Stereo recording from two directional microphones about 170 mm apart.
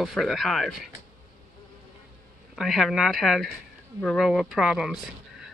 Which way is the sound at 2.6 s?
Centre (ahead or behind).